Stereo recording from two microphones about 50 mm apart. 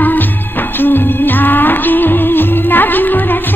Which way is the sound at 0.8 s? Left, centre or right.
Left.